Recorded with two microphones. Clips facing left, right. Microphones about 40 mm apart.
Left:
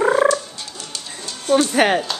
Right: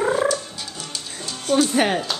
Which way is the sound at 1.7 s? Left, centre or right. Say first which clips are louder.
Left 4 dB; left.